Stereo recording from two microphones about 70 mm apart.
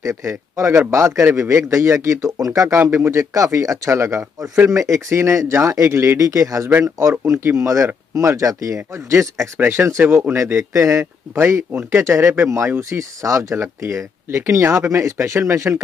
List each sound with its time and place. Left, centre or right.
0.0 s speech: right
2.8 s speech: right
10.0 s speech: right
10.3 s speech: right